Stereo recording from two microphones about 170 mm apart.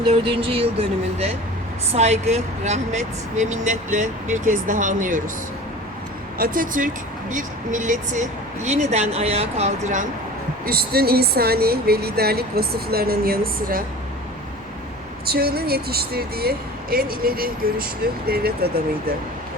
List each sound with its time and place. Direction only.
0.1 s speech: 35° right (ahead or behind); by 5.2 s 50° right (ahead or behind)
6.4 s speech: 55° right (ahead or behind)
10.7 s speech: 65° right (ahead or behind)
15.3 s speech: 65° right (ahead or behind)